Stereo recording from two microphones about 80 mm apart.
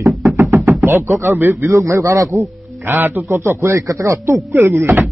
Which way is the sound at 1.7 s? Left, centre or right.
Right.